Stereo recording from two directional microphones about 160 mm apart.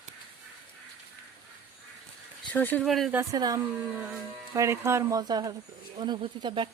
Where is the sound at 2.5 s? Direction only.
10° left (ahead or behind).